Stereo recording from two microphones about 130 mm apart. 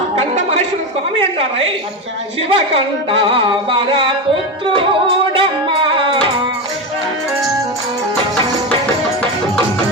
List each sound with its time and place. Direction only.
0.2 s chatter: 55° right (ahead or behind)
2.5 s carnatic music: 45° right (ahead or behind)
4.6 s music: 45° right (ahead or behind)